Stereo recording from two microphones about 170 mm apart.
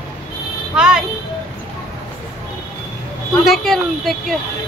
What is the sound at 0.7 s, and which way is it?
Speech, 5° right (ahead or behind).